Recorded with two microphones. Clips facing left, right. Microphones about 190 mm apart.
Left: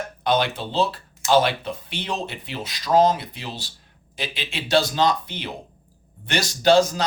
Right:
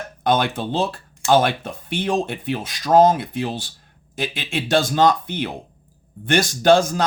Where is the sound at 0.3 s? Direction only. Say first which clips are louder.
Right 3 dB; 50° right (ahead or behind).